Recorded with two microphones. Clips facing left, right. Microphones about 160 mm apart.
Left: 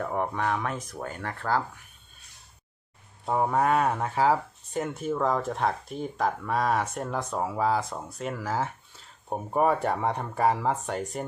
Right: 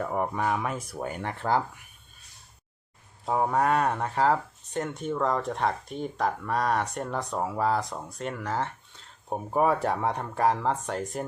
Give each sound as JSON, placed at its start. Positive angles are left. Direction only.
{"t": 0.0, "sound": "speech", "side_deg": -5}
{"t": 3.2, "sound": "speech", "side_deg": 0}